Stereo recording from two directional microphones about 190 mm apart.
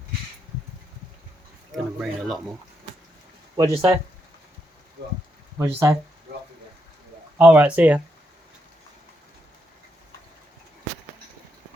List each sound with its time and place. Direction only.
1.7 s speech: centre (ahead or behind)
3.6 s speech: 15° right (ahead or behind)
5.5 s speech: 15° right (ahead or behind)
7.3 s speech: 5° right (ahead or behind)